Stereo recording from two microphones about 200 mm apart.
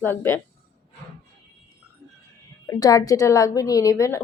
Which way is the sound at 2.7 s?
20° left (ahead or behind).